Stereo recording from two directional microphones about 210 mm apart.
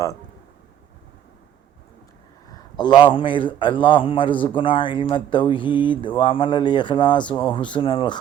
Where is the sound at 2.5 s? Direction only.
20° left (ahead or behind).